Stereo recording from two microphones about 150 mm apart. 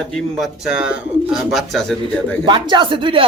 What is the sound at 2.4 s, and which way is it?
Speech, 30° right (ahead or behind).